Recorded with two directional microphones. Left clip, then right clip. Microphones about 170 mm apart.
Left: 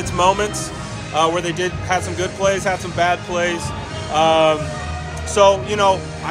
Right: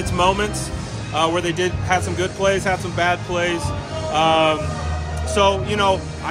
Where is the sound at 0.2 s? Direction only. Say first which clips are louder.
Left 2 dB; 15° right (ahead or behind).